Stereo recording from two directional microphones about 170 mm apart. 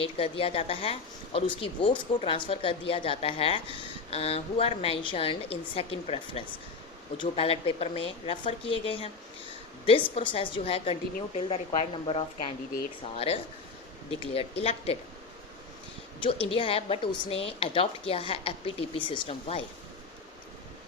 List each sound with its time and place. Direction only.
0.0 s speech: 35° left (ahead or behind)
16.2 s speech: 30° left (ahead or behind)